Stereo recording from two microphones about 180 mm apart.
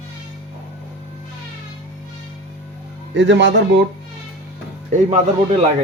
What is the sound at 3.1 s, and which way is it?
Speech, 85° right.